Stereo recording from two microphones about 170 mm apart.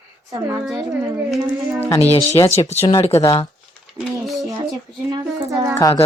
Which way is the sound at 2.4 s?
25° left (ahead or behind).